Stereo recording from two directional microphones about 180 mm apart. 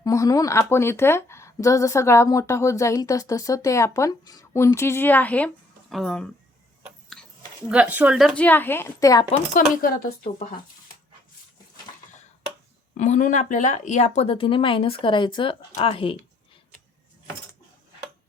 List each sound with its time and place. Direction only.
0.0 s speech: 20° left (ahead or behind); by 6.2 s centre (ahead or behind)
7.7 s speech: 5° right (ahead or behind)
8.4 s speech: 10° left (ahead or behind)
9.8 s speech: 50° left (ahead or behind)
12.9 s speech: 45° left (ahead or behind)